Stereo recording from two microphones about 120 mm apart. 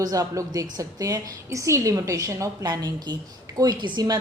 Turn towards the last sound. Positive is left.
turn(degrees=-35)  # may be behind; listen again after turning